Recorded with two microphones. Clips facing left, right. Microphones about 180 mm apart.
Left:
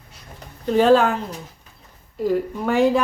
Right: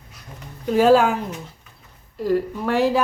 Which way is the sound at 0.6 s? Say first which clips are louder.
Even; 5° right (ahead or behind).